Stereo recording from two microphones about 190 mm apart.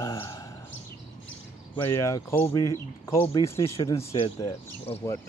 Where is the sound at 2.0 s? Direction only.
15° left (ahead or behind).